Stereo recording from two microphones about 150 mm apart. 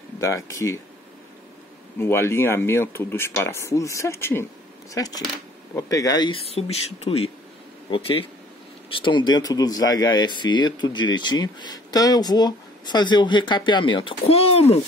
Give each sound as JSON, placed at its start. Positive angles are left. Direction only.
{"t": 0.2, "sound": "speech", "side_deg": 20}
{"t": 2.0, "sound": "speech", "side_deg": 15}